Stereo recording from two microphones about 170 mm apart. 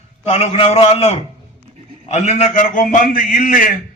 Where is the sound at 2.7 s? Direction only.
50° left (ahead or behind).